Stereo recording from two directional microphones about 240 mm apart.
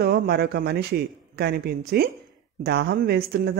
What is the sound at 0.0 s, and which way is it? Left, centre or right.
Speech, right.